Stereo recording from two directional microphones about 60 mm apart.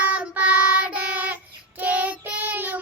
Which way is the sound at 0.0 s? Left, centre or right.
Right.